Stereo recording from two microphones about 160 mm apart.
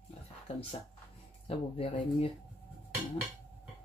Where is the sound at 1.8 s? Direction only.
35° left (ahead or behind).